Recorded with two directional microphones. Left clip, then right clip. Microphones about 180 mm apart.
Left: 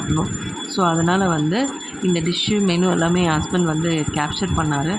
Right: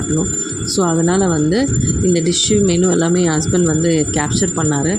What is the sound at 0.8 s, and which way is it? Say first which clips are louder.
Speech: right 2 dB; 25° right (ahead or behind).